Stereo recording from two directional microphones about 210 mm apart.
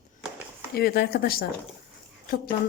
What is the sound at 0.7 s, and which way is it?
A woman's voice, 45° left (ahead or behind).